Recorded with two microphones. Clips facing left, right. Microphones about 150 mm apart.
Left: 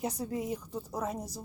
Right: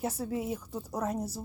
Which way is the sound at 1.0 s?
10° left (ahead or behind).